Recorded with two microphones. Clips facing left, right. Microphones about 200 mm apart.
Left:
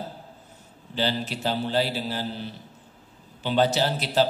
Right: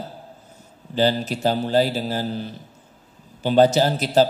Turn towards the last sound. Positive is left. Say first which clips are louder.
# right 6 dB
turn(degrees=-45)  # may be behind; listen again after turning